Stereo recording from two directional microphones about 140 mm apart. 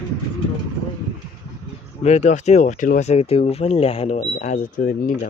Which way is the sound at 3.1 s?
45° left (ahead or behind).